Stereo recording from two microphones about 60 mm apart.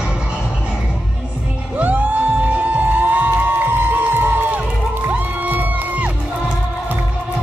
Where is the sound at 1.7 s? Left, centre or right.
Right.